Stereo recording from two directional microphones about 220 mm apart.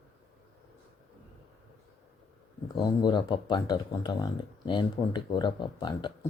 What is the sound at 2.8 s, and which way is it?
Speech, 20° left (ahead or behind).